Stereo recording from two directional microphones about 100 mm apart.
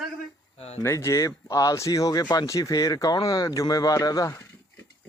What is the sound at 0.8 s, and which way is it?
Speech, 30° left (ahead or behind).